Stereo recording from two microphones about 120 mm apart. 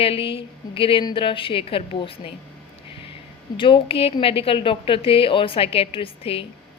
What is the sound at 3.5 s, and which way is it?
A woman's voice, 45° left (ahead or behind).